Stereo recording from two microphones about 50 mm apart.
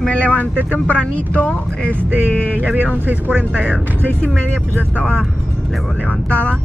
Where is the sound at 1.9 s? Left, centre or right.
Right.